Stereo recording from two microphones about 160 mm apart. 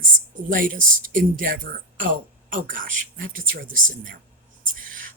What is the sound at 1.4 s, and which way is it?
Speech, 70° right (ahead or behind).